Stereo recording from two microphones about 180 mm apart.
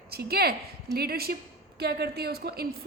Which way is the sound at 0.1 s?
60° right (ahead or behind).